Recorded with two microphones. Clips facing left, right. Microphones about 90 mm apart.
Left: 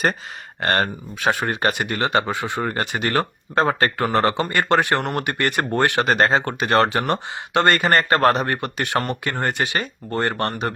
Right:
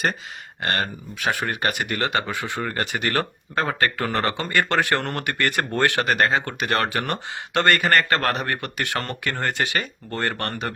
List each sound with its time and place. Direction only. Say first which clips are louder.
0.6 s speech: left 5 dB; 40° left (ahead or behind)
1.2 s speech: left 4 dB; 25° left (ahead or behind)